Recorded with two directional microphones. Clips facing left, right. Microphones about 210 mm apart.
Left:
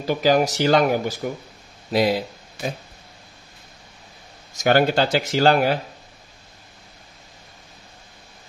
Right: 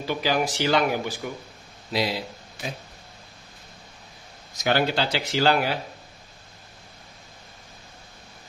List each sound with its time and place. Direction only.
0.0 s speech: 45° left (ahead or behind)
4.6 s speech: 50° left (ahead or behind)